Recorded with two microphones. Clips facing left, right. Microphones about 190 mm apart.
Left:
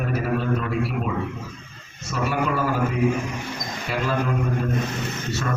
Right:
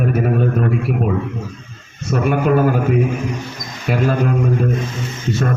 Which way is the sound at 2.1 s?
55° right (ahead or behind).